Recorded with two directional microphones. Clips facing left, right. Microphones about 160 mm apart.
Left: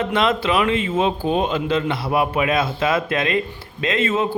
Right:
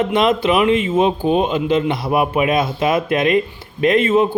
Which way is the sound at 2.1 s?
20° right (ahead or behind).